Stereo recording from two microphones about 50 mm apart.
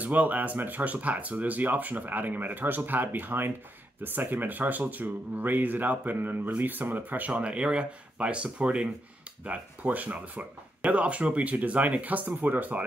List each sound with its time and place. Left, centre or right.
0.0 s speech: right